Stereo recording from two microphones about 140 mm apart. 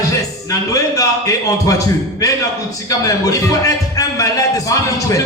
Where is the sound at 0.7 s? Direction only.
25° left (ahead or behind).